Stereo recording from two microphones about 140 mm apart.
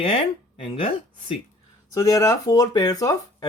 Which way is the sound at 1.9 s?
25° left (ahead or behind).